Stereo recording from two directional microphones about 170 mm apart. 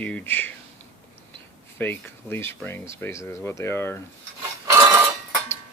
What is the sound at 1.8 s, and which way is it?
Stir, 10° left (ahead or behind).